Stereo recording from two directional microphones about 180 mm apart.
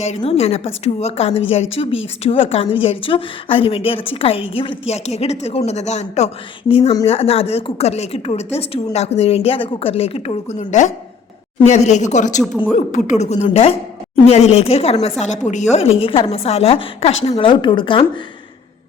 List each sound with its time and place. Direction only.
0.0 s a woman's voice: 35° left (ahead or behind)